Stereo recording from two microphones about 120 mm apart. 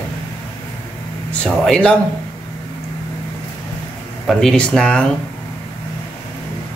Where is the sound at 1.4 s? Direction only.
10° left (ahead or behind).